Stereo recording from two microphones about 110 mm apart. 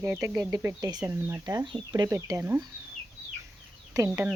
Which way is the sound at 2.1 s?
25° right (ahead or behind).